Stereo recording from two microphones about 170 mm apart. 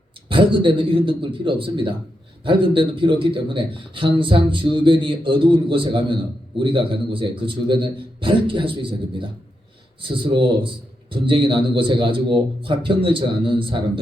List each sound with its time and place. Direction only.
0.3 s a man's voice: 30° right (ahead or behind)